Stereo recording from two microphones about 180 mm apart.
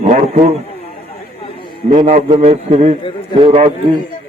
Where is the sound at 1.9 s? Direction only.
30° right (ahead or behind).